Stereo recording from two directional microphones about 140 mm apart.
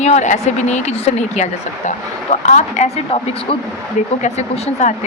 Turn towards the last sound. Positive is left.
turn(degrees=55)  # may be behind; listen again after turning